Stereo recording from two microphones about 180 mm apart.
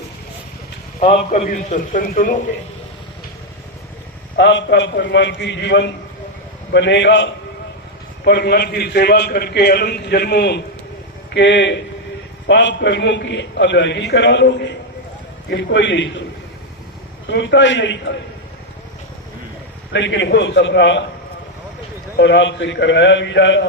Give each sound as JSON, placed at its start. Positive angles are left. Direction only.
{"t": 0.9, "sound": "a man's voice", "side_deg": 35}
{"t": 4.4, "sound": "a man's voice", "side_deg": 80}
{"t": 8.2, "sound": "a man's voice", "side_deg": 65}
{"t": 11.3, "sound": "a man's voice", "side_deg": 80}
{"t": 17.2, "sound": "a man's voice", "side_deg": 80}
{"t": 19.9, "sound": "a man's voice", "side_deg": 90}
{"t": 22.2, "sound": "a man's voice", "side_deg": 80}